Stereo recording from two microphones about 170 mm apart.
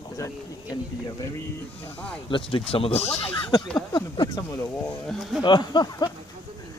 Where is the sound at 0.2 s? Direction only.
20° left (ahead or behind).